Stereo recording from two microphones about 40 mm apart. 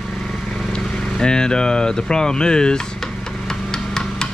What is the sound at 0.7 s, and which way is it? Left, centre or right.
Speech, centre.